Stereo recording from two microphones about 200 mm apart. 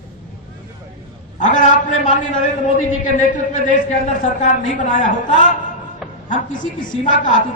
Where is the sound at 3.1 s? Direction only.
40° left (ahead or behind).